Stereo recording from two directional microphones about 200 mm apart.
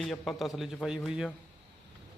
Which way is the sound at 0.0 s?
Centre (ahead or behind).